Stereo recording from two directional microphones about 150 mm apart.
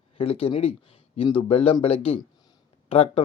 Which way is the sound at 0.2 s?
40° left (ahead or behind).